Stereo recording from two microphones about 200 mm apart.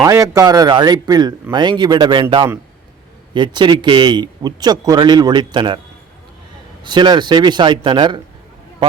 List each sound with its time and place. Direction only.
0.0 s speech: 15° right (ahead or behind)
6.8 s speech: 20° right (ahead or behind)